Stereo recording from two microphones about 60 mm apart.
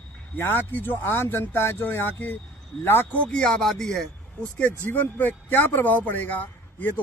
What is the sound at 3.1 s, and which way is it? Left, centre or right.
Speech, centre.